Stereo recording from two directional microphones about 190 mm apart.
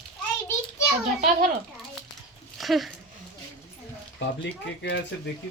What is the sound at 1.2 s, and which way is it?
Speech, 40° right (ahead or behind).